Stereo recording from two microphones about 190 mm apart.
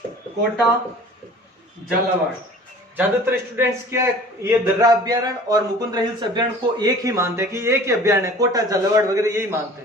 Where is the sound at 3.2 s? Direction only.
10° right (ahead or behind).